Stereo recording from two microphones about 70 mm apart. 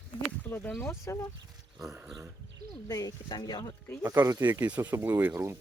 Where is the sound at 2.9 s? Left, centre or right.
Left.